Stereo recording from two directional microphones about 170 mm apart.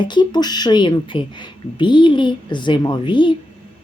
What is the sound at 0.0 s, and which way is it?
Speech, 25° left (ahead or behind).